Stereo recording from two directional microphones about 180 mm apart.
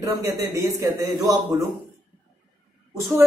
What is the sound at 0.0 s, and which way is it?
Speech, 15° right (ahead or behind).